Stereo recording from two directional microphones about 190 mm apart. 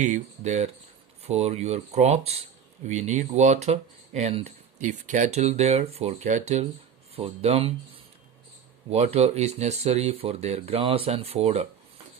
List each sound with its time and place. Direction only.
0.0 s speech: 40° right (ahead or behind)
8.9 s speech: 35° right (ahead or behind)